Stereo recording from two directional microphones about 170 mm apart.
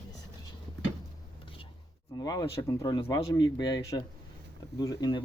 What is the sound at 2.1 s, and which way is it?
Speech, 25° left (ahead or behind).